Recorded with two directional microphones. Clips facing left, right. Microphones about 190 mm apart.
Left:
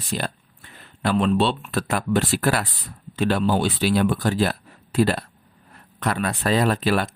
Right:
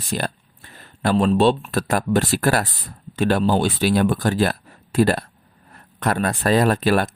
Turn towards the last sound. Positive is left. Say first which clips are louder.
# right 3 dB
turn(degrees=-45)  # may be behind; listen again after turning